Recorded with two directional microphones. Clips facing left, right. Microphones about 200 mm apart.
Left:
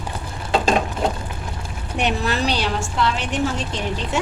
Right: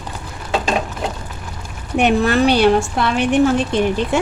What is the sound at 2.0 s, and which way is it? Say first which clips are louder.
A woman's voice: right 8 dB; 55° right (ahead or behind).